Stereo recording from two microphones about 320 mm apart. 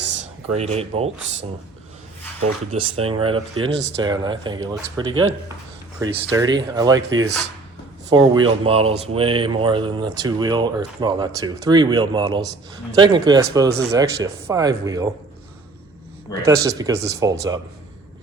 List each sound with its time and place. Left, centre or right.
0.1 s speech: right
7.1 s speech: right
8.1 s speech: centre
16.6 s speech: centre